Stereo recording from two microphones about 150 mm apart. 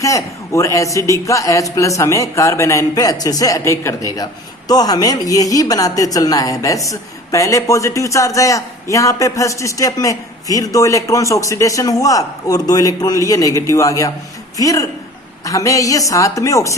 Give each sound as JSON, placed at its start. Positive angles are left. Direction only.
{"t": 0.0, "sound": "a woman's voice", "side_deg": 20}